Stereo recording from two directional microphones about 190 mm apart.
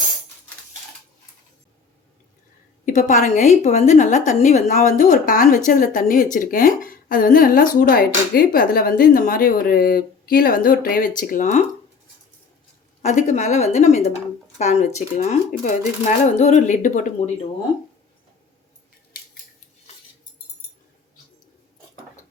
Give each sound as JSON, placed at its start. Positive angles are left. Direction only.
{"t": 2.8, "sound": "a woman's voice", "side_deg": 40}
{"t": 13.0, "sound": "a woman's voice", "side_deg": 40}